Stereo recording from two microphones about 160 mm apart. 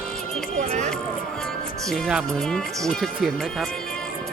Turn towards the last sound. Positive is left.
turn(degrees=0)  # may be behind; listen again after turning